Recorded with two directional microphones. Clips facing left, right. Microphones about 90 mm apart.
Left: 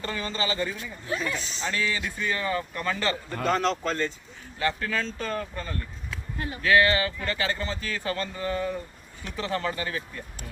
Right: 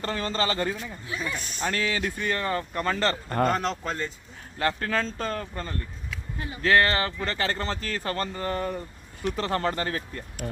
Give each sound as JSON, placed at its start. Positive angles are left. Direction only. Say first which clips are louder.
{"t": 0.0, "sound": "speech", "louder": "right 3 dB", "side_deg": -45}
{"t": 3.5, "sound": "speech", "louder": "left 2 dB", "side_deg": -15}
{"t": 4.6, "sound": "speech", "louder": "right 1 dB", "side_deg": -45}